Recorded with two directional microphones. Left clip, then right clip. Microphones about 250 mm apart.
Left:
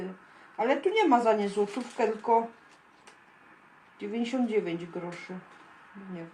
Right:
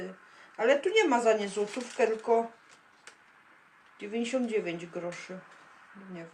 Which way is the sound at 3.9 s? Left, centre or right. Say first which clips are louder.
Even; centre.